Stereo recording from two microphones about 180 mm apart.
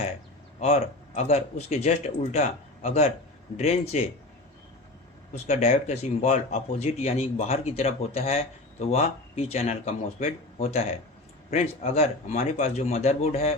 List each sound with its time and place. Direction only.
0.6 s speech: 35° left (ahead or behind)
5.5 s speech: 40° left (ahead or behind)